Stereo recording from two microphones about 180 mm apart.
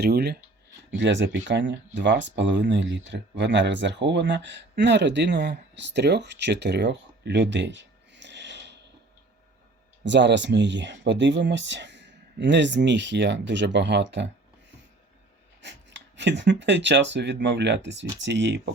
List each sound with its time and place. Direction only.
0.0 s speech: 65° right (ahead or behind)
0.9 s speech: 80° right
10.0 s speech: 80° right
15.6 s speech: 80° right